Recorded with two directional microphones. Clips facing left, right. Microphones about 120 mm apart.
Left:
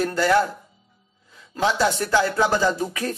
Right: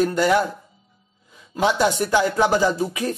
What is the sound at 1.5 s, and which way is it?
Speech, 15° right (ahead or behind).